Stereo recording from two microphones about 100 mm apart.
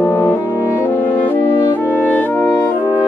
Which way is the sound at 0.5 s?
20° right (ahead or behind).